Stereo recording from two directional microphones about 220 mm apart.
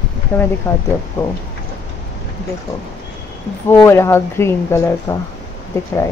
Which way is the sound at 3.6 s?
10° left (ahead or behind).